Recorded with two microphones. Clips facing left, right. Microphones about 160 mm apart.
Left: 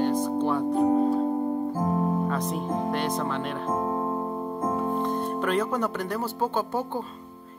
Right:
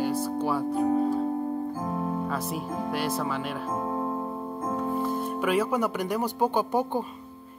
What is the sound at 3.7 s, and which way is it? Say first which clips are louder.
Keyboard: left 2 dB; 30° left (ahead or behind).